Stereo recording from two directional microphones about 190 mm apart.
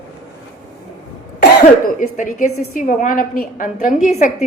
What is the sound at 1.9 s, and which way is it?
A woman's voice, 45° left (ahead or behind).